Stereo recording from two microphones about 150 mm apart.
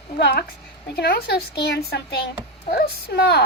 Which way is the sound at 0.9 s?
90° left.